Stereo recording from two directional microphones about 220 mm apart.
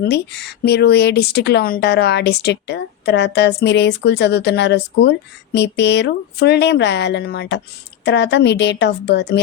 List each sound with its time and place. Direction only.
0.0 s speech: 50° left (ahead or behind)